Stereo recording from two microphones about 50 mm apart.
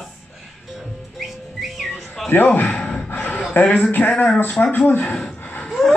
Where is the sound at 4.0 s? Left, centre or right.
Centre.